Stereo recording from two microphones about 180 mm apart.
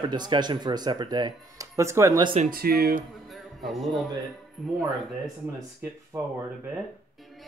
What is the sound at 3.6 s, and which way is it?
Speech, centre (ahead or behind).